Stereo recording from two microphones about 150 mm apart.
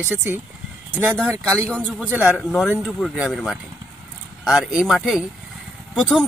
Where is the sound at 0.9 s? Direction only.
15° right (ahead or behind).